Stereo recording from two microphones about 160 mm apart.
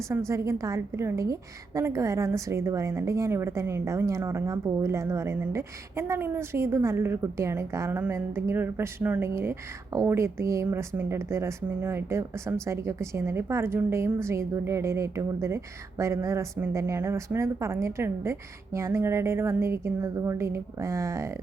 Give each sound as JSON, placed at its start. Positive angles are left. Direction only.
{"t": 0.1, "sound": "a woman's voice", "side_deg": -20}